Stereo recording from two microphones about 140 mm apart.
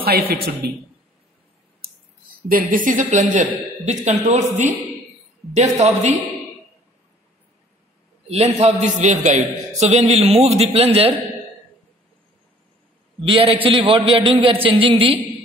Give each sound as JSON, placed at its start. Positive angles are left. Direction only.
{"t": 2.5, "sound": "speech", "side_deg": -80}
{"t": 8.3, "sound": "a man's voice", "side_deg": -50}
{"t": 13.2, "sound": "speech", "side_deg": -40}